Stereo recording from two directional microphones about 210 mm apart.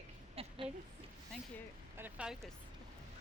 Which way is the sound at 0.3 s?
25° right (ahead or behind).